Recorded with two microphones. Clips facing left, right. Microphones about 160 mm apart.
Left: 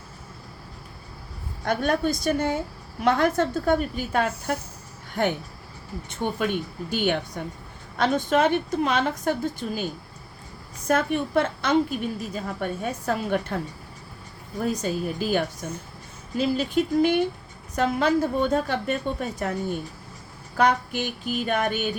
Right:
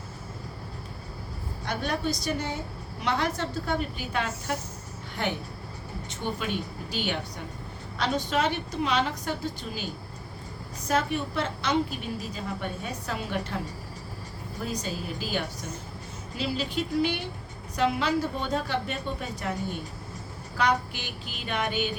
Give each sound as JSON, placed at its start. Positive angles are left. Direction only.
{"t": 1.6, "sound": "a woman's voice", "side_deg": 50}
{"t": 6.2, "sound": "a woman's voice", "side_deg": 50}
{"t": 10.8, "sound": "a woman's voice", "side_deg": 50}
{"t": 20.6, "sound": "a woman's voice", "side_deg": 50}